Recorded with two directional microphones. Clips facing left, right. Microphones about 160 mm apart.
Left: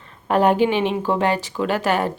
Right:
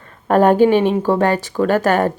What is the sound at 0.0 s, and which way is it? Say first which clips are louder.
A woman's voice: right 4 dB; 45° right (ahead or behind).